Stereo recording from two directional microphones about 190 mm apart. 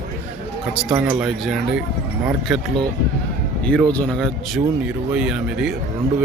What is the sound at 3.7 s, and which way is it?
Speech, 5° left (ahead or behind).